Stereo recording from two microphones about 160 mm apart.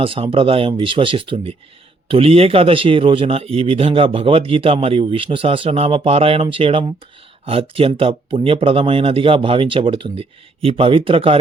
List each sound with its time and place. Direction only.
0.0 s speech: 35° right (ahead or behind)